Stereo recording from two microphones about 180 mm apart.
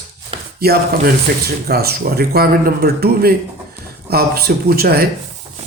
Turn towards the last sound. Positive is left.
turn(degrees=-60)  # may be behind; listen again after turning